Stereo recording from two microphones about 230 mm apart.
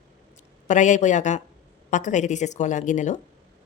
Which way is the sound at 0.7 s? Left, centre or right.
Left.